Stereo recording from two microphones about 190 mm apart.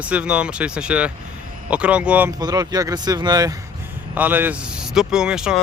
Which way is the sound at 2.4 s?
20° right (ahead or behind).